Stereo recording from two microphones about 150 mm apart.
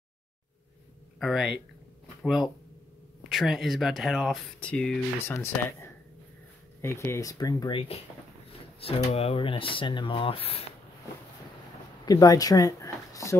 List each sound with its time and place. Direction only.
1.2 s speech: 5° right (ahead or behind)
5.3 s speech: 15° left (ahead or behind)
8.7 s speech: 40° left (ahead or behind)
12.1 s speech: 25° left (ahead or behind)